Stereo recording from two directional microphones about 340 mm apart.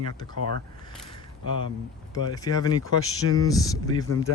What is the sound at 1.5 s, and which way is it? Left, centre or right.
Speech, right.